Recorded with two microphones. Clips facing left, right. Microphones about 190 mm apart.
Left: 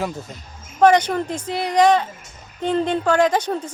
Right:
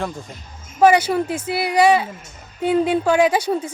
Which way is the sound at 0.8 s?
10° right (ahead or behind).